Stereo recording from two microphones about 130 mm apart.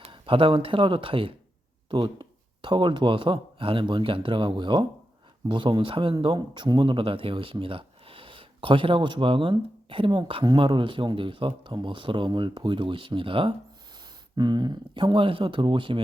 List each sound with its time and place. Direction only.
0.0 s speech: 40° right (ahead or behind)